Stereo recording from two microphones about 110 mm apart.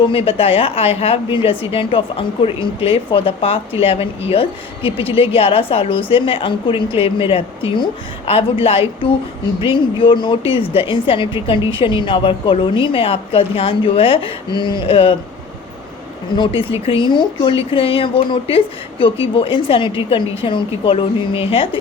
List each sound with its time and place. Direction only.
0.0 s a woman's voice: 55° left (ahead or behind)
16.3 s a woman's voice: 50° left (ahead or behind)